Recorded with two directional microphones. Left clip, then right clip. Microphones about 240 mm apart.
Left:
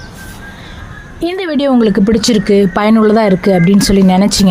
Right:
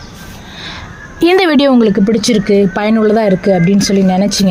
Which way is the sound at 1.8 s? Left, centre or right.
Centre.